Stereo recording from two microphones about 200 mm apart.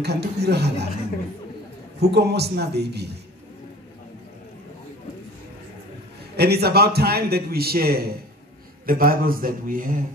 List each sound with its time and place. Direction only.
0.0 s a man's voice: 55° right (ahead or behind)
2.0 s a man's voice: 55° right (ahead or behind)
6.3 s a man's voice: 55° right (ahead or behind)